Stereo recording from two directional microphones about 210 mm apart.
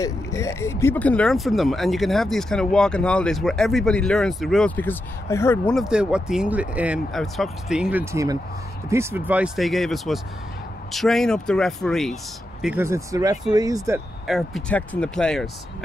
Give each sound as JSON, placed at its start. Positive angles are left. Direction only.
{"t": 0.0, "sound": "speech", "side_deg": 15}
{"t": 5.8, "sound": "speech", "side_deg": -5}
{"t": 12.6, "sound": "speech", "side_deg": -10}
{"t": 14.2, "sound": "speech", "side_deg": 0}